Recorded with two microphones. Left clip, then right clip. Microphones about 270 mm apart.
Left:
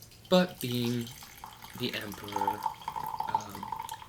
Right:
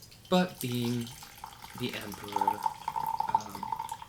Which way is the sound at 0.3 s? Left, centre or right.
Centre.